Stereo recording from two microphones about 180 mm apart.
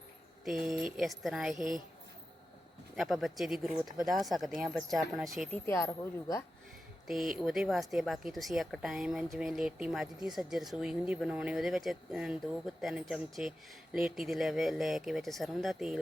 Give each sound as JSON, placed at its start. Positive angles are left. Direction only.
{"t": 0.4, "sound": "speech", "side_deg": 0}
{"t": 2.9, "sound": "speech", "side_deg": 0}
{"t": 5.6, "sound": "a woman's voice", "side_deg": 15}
{"t": 7.1, "sound": "speech", "side_deg": 0}